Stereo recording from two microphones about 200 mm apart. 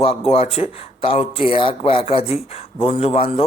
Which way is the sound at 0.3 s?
30° left (ahead or behind).